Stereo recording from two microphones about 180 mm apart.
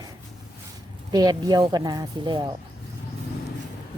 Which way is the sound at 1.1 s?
20° right (ahead or behind).